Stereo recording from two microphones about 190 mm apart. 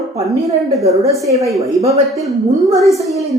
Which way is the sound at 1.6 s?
15° right (ahead or behind).